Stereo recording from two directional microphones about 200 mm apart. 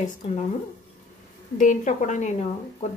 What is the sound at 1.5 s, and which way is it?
A woman's voice, 40° left (ahead or behind).